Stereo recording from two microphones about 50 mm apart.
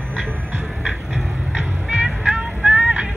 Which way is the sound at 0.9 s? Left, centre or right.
Centre.